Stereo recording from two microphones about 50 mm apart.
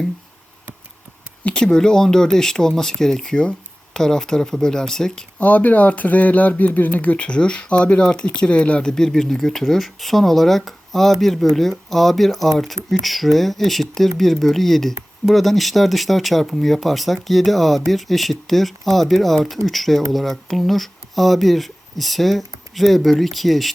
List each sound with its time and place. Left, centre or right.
1.5 s speech: centre
5.4 s speech: left
8.9 s speech: centre